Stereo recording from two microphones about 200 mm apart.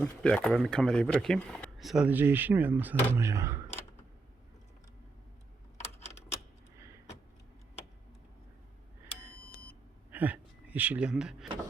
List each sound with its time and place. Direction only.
0.0 s speech: 5° left (ahead or behind); by 3.6 s 15° right (ahead or behind)
5.8 s typewriter: 35° left (ahead or behind)
10.1 s speech: 10° right (ahead or behind)